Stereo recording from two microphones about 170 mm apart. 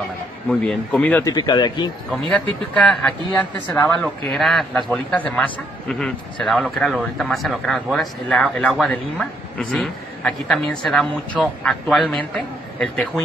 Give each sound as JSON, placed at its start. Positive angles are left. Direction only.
{"t": 0.5, "sound": "a man's voice", "side_deg": 5}
{"t": 1.2, "sound": "speech", "side_deg": 25}
{"t": 2.0, "sound": "a man's voice", "side_deg": 5}